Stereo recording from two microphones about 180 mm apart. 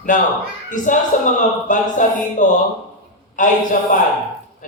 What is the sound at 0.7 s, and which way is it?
Speech, 45° left (ahead or behind).